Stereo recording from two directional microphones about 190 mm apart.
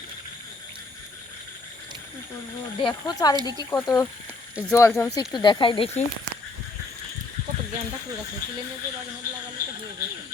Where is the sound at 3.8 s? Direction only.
20° left (ahead or behind).